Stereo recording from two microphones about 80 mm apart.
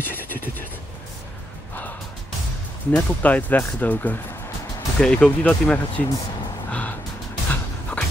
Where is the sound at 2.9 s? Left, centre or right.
Centre.